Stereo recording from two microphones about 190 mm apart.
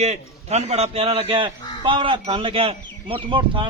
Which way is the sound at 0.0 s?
35° right (ahead or behind).